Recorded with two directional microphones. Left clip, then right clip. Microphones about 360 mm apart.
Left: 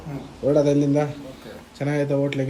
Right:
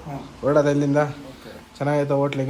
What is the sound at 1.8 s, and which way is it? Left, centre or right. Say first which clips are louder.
Speech: right 4 dB; centre.